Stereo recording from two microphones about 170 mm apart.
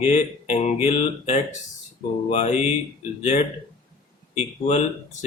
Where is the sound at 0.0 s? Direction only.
40° left (ahead or behind).